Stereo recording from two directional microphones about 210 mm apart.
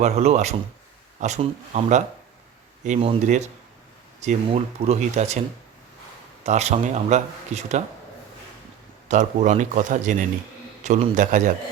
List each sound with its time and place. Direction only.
0.0 s speech: 30° right (ahead or behind)
6.4 s speech: 30° right (ahead or behind)
9.0 s speech: 35° right (ahead or behind)